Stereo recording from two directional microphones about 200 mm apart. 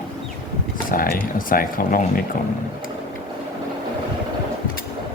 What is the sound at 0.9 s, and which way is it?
Speech, 45° left (ahead or behind).